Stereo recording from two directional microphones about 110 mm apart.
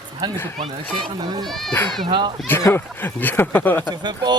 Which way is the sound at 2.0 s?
45° right (ahead or behind).